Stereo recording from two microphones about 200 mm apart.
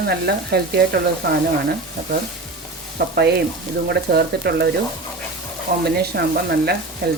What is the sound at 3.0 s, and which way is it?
Frying, 50° right (ahead or behind).